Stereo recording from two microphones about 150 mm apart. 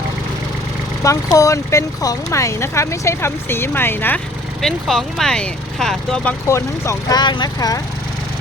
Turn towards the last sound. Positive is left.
turn(degrees=25)  # may be behind; listen again after turning